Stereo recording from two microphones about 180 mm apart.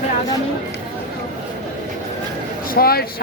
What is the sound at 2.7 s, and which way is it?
Speech, 60° left (ahead or behind).